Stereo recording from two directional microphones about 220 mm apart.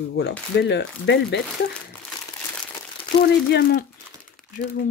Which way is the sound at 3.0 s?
25° left (ahead or behind).